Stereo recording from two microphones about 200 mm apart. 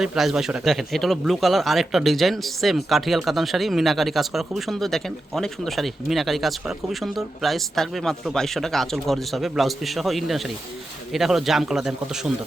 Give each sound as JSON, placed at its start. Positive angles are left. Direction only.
{"t": 0.0, "sound": "speech", "side_deg": 0}